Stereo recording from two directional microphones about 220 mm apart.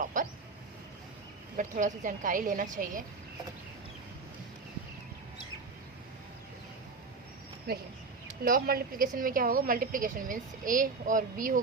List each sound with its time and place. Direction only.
0.0 s vehicle: 35° right (ahead or behind)
1.5 s a woman's voice: 35° right (ahead or behind)
7.7 s a woman's voice: 45° right (ahead or behind)